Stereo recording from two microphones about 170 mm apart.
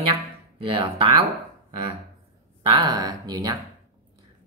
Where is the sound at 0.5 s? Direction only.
30° right (ahead or behind).